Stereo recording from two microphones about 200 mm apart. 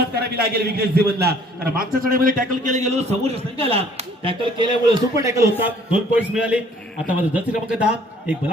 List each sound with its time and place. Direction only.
0.1 s a man's voice: 50° right (ahead or behind); by 7.8 s 5° right (ahead or behind)